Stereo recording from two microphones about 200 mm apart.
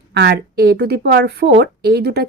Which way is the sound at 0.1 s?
55° right (ahead or behind).